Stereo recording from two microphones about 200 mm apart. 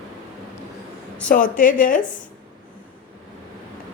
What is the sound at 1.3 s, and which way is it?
Speech, 40° left (ahead or behind).